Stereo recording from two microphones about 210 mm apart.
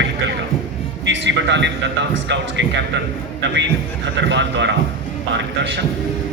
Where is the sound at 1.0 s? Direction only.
60° right (ahead or behind).